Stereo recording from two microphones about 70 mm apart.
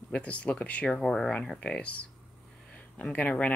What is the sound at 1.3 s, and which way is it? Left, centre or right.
Speech, centre.